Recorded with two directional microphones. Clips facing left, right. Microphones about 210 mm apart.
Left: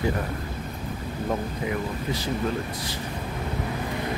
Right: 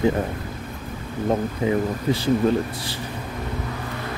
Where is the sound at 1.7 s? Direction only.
30° right (ahead or behind).